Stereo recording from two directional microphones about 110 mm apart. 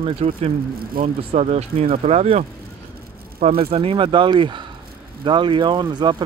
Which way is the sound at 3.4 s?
60° right (ahead or behind).